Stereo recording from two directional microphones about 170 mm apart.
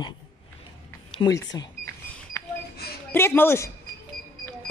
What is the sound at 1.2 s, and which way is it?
Speech, 20° left (ahead or behind).